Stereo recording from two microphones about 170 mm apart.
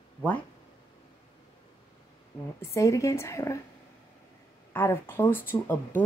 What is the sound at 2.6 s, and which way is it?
Speech, 15° left (ahead or behind).